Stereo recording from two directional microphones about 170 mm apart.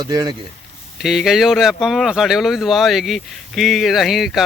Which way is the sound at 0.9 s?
Centre (ahead or behind).